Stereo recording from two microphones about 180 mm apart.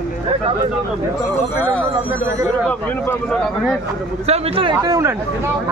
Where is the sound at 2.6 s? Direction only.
5° left (ahead or behind).